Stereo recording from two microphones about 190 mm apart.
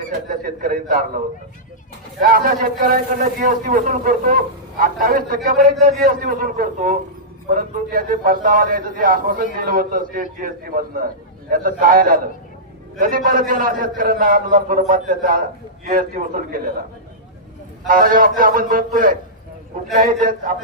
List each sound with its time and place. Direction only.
0.3 s a man's voice: 50° right (ahead or behind)
2.2 s a man's voice: 50° right (ahead or behind)
17.8 s a man's voice: 50° right (ahead or behind)